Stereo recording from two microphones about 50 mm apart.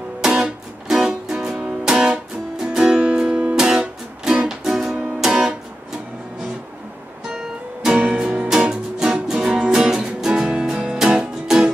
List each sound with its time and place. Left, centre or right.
0.4 s music: centre
5.2 s guitar: centre
7.3 s music: centre